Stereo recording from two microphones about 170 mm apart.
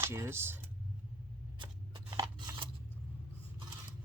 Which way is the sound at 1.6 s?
30° right (ahead or behind).